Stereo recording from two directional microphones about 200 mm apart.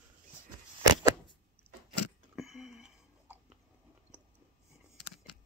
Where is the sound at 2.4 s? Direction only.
Centre (ahead or behind).